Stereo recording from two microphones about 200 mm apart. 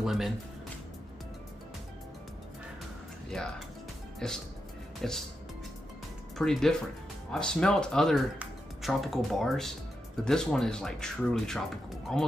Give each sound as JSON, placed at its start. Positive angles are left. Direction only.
{"t": 0.0, "sound": "speech", "side_deg": 0}
{"t": 4.2, "sound": "speech", "side_deg": 5}
{"t": 6.3, "sound": "speech", "side_deg": 0}